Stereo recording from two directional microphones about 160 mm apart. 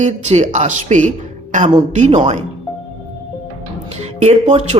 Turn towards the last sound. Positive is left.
turn(degrees=-45)  # may be behind; listen again after turning